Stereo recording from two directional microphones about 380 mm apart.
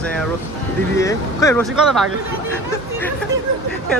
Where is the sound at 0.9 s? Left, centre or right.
Centre.